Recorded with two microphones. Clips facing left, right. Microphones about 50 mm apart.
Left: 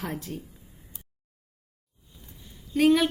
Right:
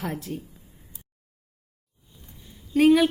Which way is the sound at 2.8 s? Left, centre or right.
Centre.